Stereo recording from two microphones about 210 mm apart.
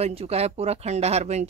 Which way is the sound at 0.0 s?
30° right (ahead or behind).